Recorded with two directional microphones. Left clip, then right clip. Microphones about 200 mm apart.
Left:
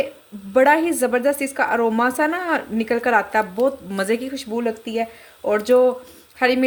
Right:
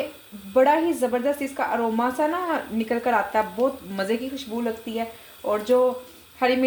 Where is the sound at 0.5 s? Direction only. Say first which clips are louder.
Left 3 dB; 40° left (ahead or behind).